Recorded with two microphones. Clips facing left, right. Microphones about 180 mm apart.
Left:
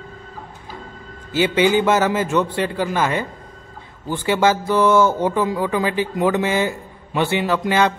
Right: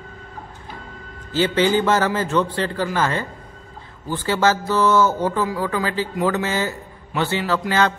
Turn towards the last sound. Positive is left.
turn(degrees=15)  # may be behind; listen again after turning